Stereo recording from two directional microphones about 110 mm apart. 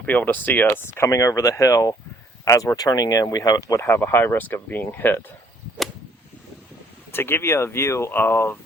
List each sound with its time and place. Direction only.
0.0 s speech: 15° left (ahead or behind)
7.1 s speech: 20° left (ahead or behind)